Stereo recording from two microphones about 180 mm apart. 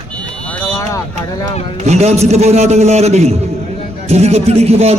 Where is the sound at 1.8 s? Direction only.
35° right (ahead or behind).